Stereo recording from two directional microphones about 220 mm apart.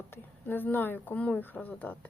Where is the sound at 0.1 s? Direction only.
10° left (ahead or behind).